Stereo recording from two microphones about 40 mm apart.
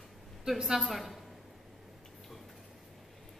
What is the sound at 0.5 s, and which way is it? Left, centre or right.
Speech, centre.